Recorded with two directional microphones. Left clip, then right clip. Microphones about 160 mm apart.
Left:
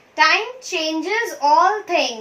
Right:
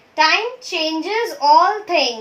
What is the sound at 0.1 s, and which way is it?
A child's voice, 15° right (ahead or behind).